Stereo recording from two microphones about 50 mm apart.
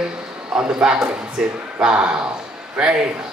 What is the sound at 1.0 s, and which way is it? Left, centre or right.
A man's voice, centre.